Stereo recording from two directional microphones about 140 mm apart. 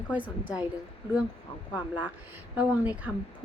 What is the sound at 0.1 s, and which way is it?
Speech, 10° right (ahead or behind).